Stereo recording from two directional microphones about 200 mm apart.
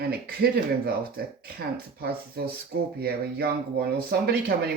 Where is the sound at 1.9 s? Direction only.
50° right (ahead or behind).